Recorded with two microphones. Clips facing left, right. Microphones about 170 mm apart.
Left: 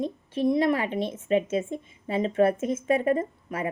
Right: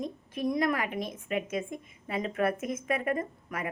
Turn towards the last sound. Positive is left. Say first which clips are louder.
# left 5 dB
turn(degrees=30)  # may be behind; listen again after turning